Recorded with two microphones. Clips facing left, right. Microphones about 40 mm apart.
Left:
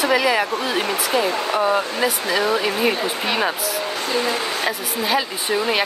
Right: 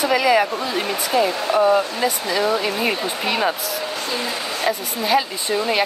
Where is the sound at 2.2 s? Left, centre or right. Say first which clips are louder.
Even; centre.